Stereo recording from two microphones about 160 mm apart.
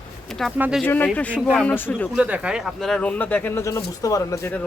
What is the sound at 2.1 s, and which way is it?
Speech, 5° right (ahead or behind).